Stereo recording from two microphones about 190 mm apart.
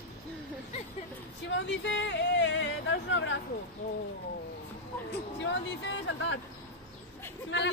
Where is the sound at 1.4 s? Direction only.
70° left (ahead or behind).